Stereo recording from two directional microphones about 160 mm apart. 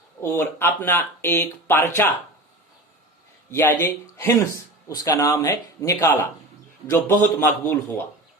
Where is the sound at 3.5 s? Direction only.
15° left (ahead or behind).